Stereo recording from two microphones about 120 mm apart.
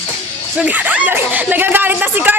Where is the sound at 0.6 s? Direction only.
15° right (ahead or behind).